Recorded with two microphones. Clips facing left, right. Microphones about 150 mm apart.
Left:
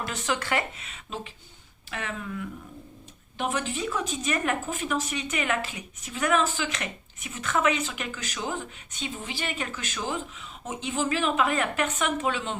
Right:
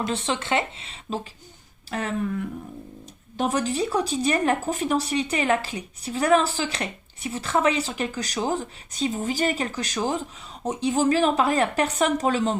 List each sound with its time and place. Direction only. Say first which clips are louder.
0.0 s speech: right 4 dB; 30° right (ahead or behind)
3.3 s speech: right 6 dB; 40° right (ahead or behind)